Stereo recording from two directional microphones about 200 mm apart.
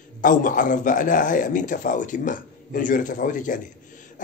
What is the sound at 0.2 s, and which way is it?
A man's voice, 40° left (ahead or behind).